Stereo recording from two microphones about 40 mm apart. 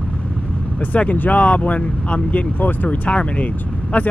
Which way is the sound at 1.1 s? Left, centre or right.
Left.